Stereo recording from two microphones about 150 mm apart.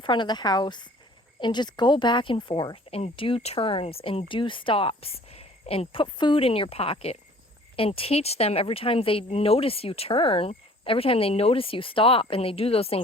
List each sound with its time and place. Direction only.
0.0 s a woman's voice: 30° left (ahead or behind)